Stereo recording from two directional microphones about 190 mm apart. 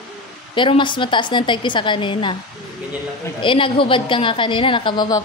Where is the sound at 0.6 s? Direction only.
25° left (ahead or behind).